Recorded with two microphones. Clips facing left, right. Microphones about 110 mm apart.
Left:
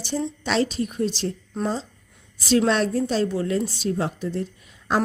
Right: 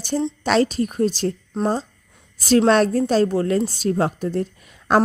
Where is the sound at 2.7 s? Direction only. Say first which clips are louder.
Right 5 dB; 50° right (ahead or behind).